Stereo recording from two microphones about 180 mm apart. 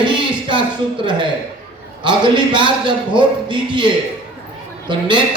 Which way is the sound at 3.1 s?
25° right (ahead or behind).